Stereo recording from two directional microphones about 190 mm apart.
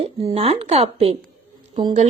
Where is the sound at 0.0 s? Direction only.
30° right (ahead or behind).